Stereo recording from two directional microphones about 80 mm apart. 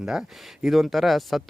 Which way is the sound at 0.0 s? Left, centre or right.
Centre.